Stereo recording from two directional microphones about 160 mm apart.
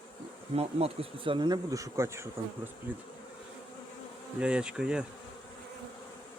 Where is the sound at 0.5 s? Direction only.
40° right (ahead or behind); by 2.3 s 15° right (ahead or behind).